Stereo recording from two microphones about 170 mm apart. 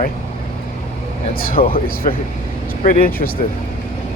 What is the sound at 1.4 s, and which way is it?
Speech, 55° left (ahead or behind).